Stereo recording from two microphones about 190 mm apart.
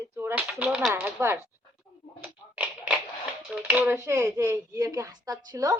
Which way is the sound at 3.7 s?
10° right (ahead or behind).